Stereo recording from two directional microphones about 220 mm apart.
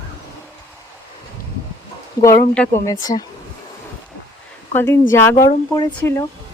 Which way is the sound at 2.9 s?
15° left (ahead or behind).